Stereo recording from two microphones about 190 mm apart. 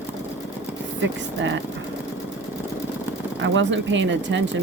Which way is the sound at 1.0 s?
75° right (ahead or behind).